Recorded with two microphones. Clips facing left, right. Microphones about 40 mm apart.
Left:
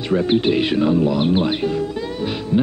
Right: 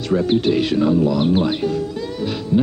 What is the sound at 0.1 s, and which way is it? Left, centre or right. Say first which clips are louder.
Speech: even; centre.